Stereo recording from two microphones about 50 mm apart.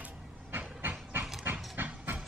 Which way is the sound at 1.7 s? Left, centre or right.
Right.